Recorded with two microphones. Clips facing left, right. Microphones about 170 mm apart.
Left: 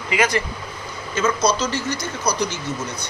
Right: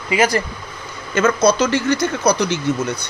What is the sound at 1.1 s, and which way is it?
Speech, 55° right (ahead or behind).